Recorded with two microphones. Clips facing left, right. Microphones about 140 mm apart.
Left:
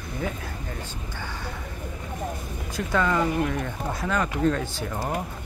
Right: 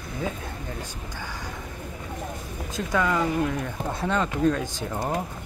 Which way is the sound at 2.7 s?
10° right (ahead or behind).